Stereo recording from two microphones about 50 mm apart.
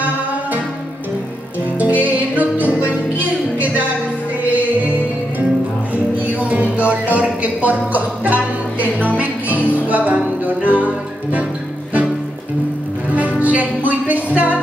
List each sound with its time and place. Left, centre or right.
1.8 s music: right
6.8 s music: right
13.4 s music: right